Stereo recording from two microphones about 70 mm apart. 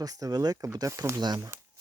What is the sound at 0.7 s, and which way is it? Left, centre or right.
Speech, right.